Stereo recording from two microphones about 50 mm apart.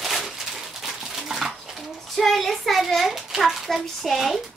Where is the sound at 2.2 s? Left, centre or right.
Centre.